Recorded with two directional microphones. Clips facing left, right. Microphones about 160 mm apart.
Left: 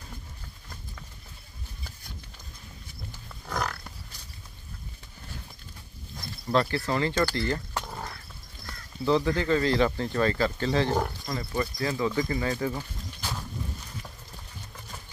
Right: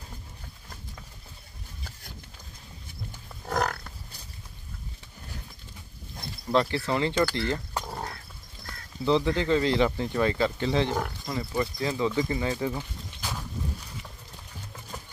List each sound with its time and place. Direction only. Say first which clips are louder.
3.4 s livestock: right 4 dB; 45° right (ahead or behind)
6.5 s speech: right 1 dB; 20° right (ahead or behind)
9.0 s speech: even; 20° right (ahead or behind)
12.2 s walk: even; 20° right (ahead or behind)